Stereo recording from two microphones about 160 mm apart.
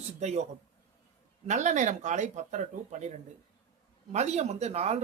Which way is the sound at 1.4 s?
50° right (ahead or behind).